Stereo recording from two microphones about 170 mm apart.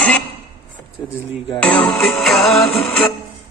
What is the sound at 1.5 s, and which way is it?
Music, 5° left (ahead or behind).